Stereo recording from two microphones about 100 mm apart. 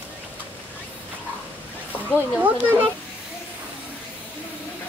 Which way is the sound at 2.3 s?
20° right (ahead or behind).